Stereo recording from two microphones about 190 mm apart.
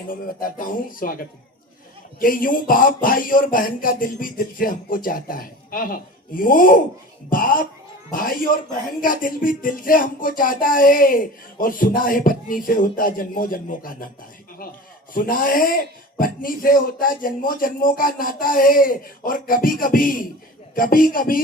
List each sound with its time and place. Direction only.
0.1 s speech: 45° left (ahead or behind)